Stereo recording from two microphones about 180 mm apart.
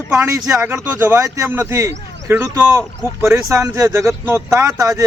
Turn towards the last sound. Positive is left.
turn(degrees=-20)  # may be behind; listen again after turning